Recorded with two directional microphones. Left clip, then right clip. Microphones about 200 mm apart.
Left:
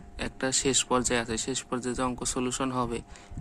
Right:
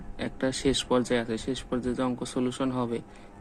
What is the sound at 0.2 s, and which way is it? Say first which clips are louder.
A man's voice: even; 10° left (ahead or behind).